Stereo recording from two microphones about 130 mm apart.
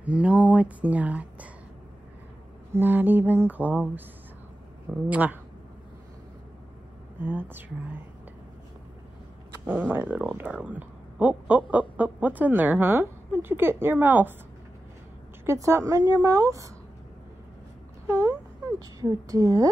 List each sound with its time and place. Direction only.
0.0 s speech: 10° right (ahead or behind)
2.7 s speech: 15° right (ahead or behind)
5.1 s speech: 10° right (ahead or behind)
7.2 s speech: 15° right (ahead or behind)
9.7 s speech: 15° right (ahead or behind)
15.4 s a woman's voice: 20° right (ahead or behind)
18.0 s a woman's voice: 25° right (ahead or behind)